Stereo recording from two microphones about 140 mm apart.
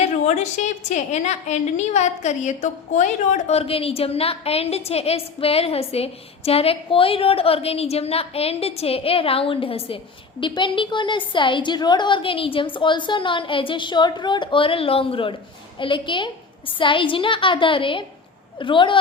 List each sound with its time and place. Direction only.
0.3 s a woman's voice: 55° left (ahead or behind); by 18.9 s 35° left (ahead or behind)